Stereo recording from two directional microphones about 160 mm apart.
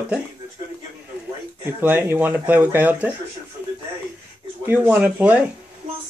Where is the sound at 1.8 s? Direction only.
10° right (ahead or behind).